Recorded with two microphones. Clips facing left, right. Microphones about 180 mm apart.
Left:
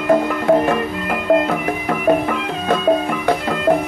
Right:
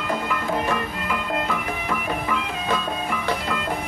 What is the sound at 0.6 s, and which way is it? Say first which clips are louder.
Music: left 7 dB; 55° left (ahead or behind).